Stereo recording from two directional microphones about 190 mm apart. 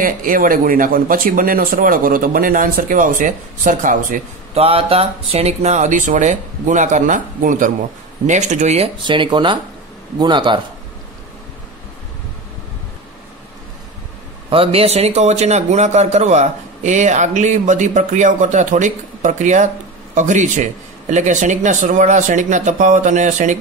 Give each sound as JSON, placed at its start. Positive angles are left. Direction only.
{"t": 0.0, "sound": "speech", "side_deg": -45}
{"t": 4.6, "sound": "a man's voice", "side_deg": -30}
{"t": 14.5, "sound": "a man's voice", "side_deg": -30}